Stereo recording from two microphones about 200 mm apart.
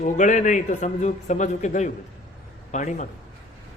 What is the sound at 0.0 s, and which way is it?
A man's voice, 40° left (ahead or behind).